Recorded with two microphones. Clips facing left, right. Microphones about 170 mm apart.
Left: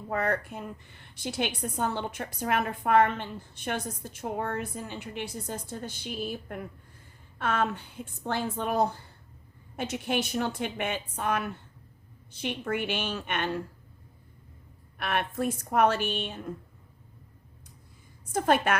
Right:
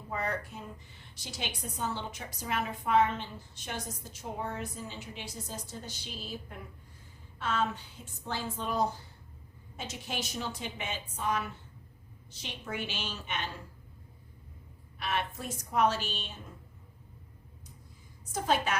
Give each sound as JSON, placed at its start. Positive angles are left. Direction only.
{"t": 0.1, "sound": "a woman's voice", "side_deg": 60}
{"t": 14.9, "sound": "a woman's voice", "side_deg": 60}
{"t": 18.3, "sound": "a woman's voice", "side_deg": 55}